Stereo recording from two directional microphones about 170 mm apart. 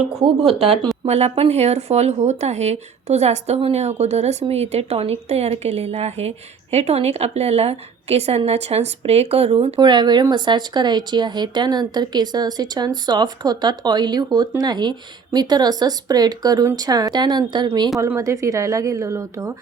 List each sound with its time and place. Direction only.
0.2 s speech: 35° right (ahead or behind); by 19.5 s 15° right (ahead or behind)